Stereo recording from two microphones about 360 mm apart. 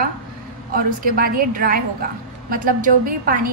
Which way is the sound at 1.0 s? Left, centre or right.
Right.